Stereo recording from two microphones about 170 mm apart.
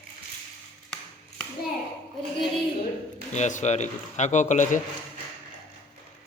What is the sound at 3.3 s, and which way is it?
A man's voice, 45° left (ahead or behind).